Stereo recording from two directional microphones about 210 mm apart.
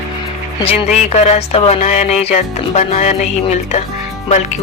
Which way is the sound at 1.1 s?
30° left (ahead or behind).